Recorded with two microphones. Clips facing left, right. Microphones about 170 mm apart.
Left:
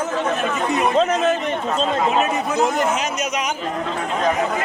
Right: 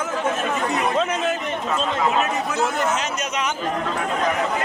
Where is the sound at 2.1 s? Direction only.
15° left (ahead or behind).